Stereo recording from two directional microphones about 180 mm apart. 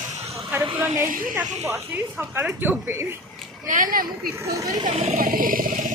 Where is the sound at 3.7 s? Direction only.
50° right (ahead or behind).